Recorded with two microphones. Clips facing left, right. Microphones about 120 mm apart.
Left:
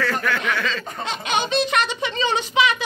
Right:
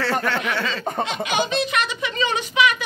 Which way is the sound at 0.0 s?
30° right (ahead or behind).